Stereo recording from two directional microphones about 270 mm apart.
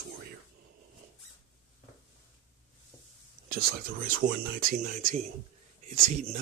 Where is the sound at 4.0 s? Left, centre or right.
Right.